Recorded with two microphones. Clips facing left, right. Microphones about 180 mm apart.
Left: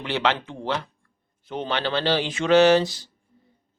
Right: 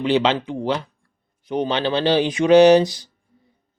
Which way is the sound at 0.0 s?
20° right (ahead or behind).